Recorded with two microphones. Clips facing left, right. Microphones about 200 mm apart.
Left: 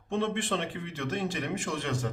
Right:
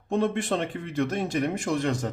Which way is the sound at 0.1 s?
40° right (ahead or behind).